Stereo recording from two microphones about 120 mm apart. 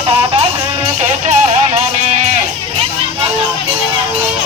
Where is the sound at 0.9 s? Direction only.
75° right (ahead or behind).